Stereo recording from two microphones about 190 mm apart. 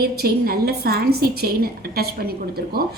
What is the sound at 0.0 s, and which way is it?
A woman's voice, 55° right (ahead or behind).